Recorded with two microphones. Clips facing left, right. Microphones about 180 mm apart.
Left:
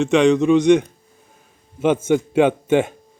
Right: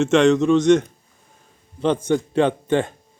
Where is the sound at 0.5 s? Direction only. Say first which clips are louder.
Left 1 dB; 15° left (ahead or behind).